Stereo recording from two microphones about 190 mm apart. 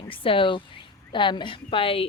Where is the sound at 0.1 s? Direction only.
30° left (ahead or behind).